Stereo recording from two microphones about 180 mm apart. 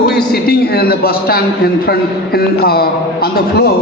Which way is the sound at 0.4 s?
60° left (ahead or behind).